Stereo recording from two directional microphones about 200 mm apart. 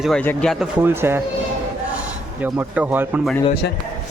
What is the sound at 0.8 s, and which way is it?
Speech, 10° right (ahead or behind).